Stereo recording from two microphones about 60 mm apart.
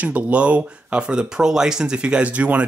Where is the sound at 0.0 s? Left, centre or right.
Right.